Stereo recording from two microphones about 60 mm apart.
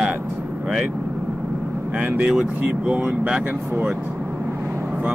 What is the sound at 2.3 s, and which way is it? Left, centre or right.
Speech, centre.